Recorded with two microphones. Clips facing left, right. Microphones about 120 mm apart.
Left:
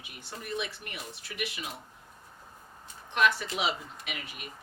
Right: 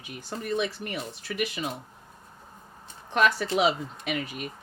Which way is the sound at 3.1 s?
40° right (ahead or behind).